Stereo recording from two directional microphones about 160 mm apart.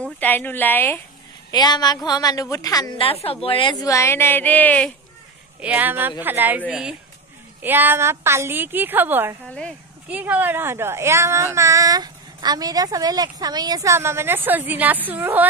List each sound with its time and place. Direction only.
0.2 s a woman's voice: 10° left (ahead or behind)
1.5 s a woman's voice: 25° left (ahead or behind)
3.0 s a woman's voice: 35° left (ahead or behind)
3.8 s a woman's voice: 20° left (ahead or behind)
5.6 s speech: 10° right (ahead or behind)
9.5 s speech: 5° left (ahead or behind)
10.0 s speech: 10° right (ahead or behind)